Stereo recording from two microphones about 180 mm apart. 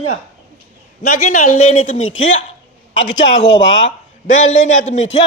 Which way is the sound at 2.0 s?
90° left.